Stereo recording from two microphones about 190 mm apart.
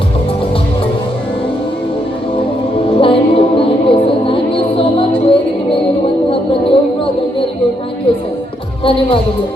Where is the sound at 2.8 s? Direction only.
30° left (ahead or behind).